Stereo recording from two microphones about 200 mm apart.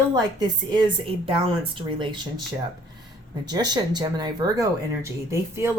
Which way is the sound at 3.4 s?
20° right (ahead or behind).